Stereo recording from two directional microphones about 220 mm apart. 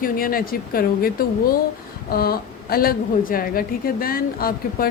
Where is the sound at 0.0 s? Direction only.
40° left (ahead or behind).